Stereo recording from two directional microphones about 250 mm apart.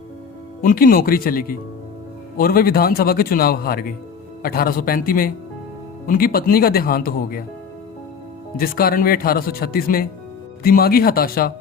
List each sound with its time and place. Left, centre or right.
0.6 s speech: left
8.5 s speech: left